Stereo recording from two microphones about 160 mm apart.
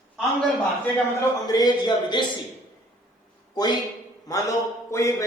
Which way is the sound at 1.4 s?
25° left (ahead or behind).